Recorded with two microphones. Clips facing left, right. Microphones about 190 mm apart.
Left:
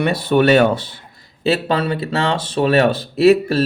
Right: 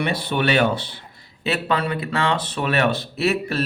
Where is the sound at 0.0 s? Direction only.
45° left (ahead or behind).